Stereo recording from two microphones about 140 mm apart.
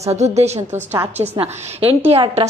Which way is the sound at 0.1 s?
50° right (ahead or behind).